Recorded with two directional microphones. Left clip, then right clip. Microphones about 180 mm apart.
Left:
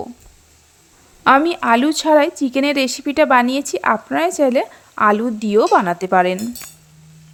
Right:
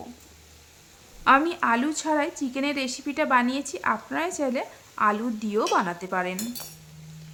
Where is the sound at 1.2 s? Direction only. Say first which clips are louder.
Left 7 dB; 35° left (ahead or behind).